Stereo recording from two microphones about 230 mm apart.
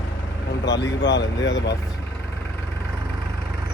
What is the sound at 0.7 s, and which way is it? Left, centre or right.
Speech, left.